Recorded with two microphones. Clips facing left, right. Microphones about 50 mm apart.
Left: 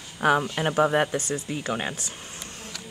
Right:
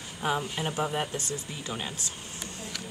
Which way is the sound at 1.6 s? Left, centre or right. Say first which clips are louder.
Left 7 dB; left.